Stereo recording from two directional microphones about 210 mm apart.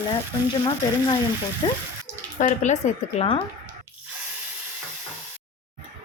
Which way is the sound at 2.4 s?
35° left (ahead or behind).